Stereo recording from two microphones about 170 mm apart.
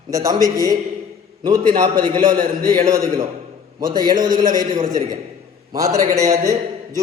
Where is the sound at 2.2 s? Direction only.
55° right (ahead or behind).